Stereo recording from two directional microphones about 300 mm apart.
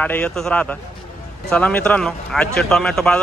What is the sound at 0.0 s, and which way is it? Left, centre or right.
Speech, centre.